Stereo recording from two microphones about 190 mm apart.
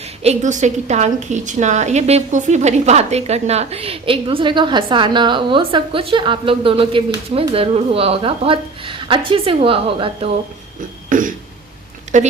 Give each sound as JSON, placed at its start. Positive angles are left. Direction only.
{"t": 0.2, "sound": "a woman's voice", "side_deg": -35}
{"t": 11.1, "sound": "a sound", "side_deg": -45}
{"t": 12.1, "sound": "speech", "side_deg": -40}